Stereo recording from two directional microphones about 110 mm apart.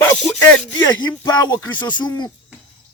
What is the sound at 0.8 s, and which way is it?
Speech, 40° left (ahead or behind).